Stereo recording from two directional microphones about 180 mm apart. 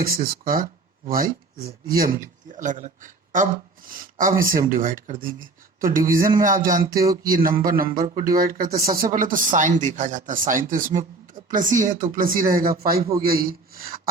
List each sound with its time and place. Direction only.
0.0 s speech: 55° right (ahead or behind)
6.9 s a sound: 20° right (ahead or behind)
7.2 s speech: 50° right (ahead or behind)